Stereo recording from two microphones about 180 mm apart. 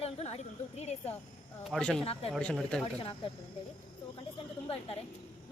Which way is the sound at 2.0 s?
30° left (ahead or behind).